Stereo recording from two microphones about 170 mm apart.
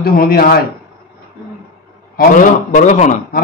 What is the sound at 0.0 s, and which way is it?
Speech, 60° left (ahead or behind).